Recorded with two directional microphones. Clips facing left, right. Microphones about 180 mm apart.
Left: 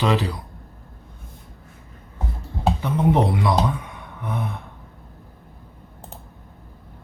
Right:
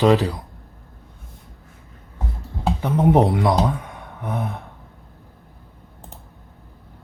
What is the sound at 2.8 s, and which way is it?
Speech, 45° right (ahead or behind).